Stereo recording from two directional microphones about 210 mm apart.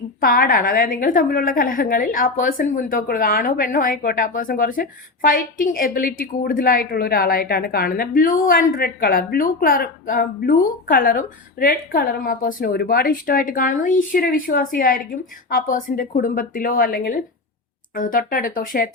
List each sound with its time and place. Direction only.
0.2 s a woman's voice: 40° left (ahead or behind)